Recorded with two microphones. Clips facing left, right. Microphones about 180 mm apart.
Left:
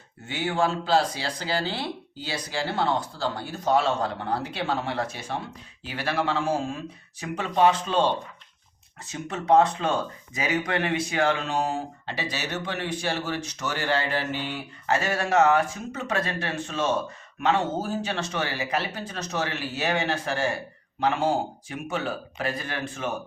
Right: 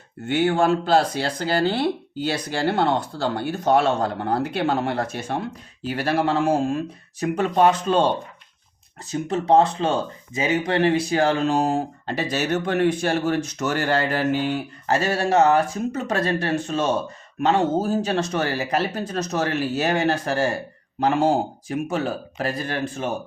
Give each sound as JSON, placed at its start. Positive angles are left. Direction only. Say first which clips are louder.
{"t": 0.3, "sound": "speech", "louder": "right 7 dB", "side_deg": -55}
{"t": 9.0, "sound": "speech", "louder": "right 4 dB", "side_deg": -35}